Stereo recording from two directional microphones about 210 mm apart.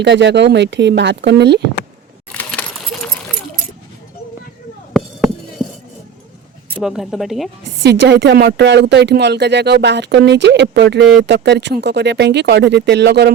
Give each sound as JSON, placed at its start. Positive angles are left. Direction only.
{"t": 0.0, "sound": "speech", "side_deg": -55}
{"t": 2.3, "sound": "keys jangling", "side_deg": 5}
{"t": 4.9, "sound": "a sound", "side_deg": 0}
{"t": 6.8, "sound": "speech", "side_deg": 0}
{"t": 7.6, "sound": "speech", "side_deg": -55}